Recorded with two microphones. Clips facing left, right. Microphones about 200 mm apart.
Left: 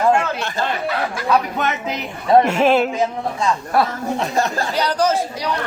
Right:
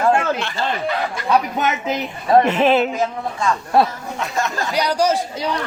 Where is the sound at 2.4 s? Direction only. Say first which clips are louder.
Even; 10° left (ahead or behind).